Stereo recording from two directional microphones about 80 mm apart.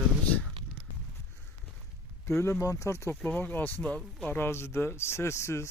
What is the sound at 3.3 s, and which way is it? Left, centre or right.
Speech, left.